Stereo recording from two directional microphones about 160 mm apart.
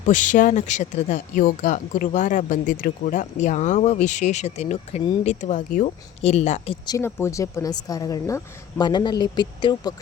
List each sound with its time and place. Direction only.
0.0 s speech: 50° left (ahead or behind)
6.8 s speech: 20° left (ahead or behind)